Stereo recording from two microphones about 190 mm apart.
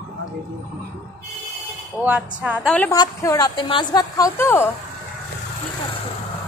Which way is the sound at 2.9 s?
20° left (ahead or behind).